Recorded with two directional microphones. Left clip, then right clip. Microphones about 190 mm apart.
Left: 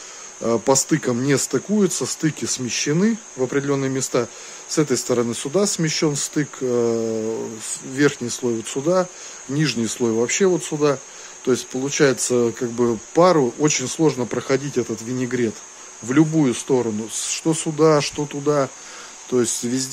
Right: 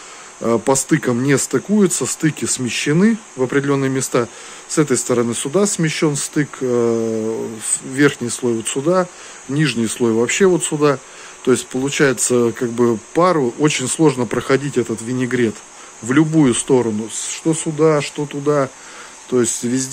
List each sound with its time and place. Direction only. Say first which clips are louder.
0.4 s speech: right 2 dB; 10° left (ahead or behind)
17.3 s speech: right 2 dB; 15° left (ahead or behind)